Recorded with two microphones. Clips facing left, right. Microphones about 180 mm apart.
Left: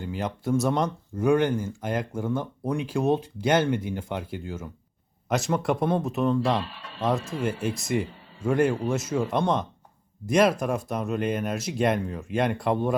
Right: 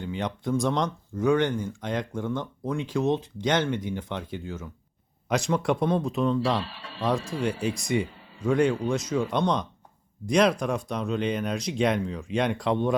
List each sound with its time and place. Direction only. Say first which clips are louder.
0.0 s speech: even; 5° left (ahead or behind)